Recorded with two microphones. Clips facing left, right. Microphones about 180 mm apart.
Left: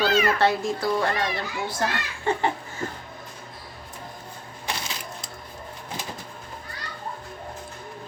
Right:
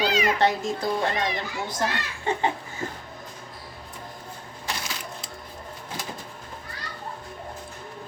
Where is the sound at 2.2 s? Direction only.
15° right (ahead or behind).